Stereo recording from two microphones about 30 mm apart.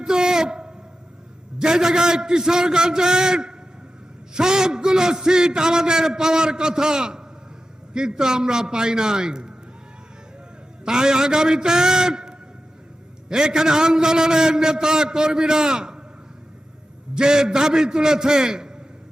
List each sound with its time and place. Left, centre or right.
0.0 s a sound: right
1.5 s a man's voice: right
10.8 s a man's voice: right
17.2 s a man's voice: right